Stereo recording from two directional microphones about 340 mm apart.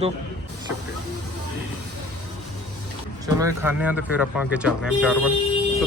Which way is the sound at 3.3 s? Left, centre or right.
Centre.